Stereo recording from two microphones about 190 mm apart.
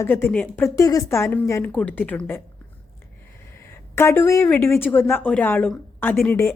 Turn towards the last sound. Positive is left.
turn(degrees=10)  # may be behind; listen again after turning